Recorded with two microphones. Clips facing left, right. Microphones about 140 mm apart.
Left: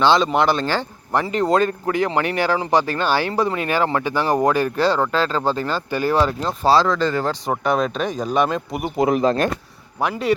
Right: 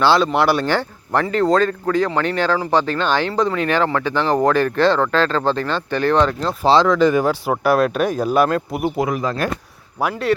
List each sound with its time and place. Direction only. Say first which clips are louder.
0.0 s speech: right 1 dB; 5° right (ahead or behind)
0.6 s speech: right 3 dB; 15° left (ahead or behind)
6.7 s speech: right 2 dB; 25° right (ahead or behind)
7.0 s speech: right 5 dB; 15° right (ahead or behind)
9.0 s speech: left 7 dB; 25° left (ahead or behind)
10.0 s speech: right 1 dB; centre (ahead or behind)